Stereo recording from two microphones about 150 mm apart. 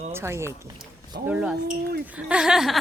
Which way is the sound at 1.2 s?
5° right (ahead or behind).